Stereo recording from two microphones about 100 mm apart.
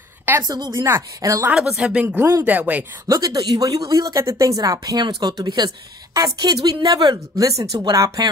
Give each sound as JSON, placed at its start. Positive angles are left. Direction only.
{"t": 0.4, "sound": "speech", "side_deg": -45}
{"t": 0.8, "sound": "speech", "side_deg": -30}
{"t": 1.5, "sound": "speech", "side_deg": -10}
{"t": 2.0, "sound": "speech", "side_deg": -25}
{"t": 3.1, "sound": "speech", "side_deg": -35}
{"t": 5.0, "sound": "speech", "side_deg": -45}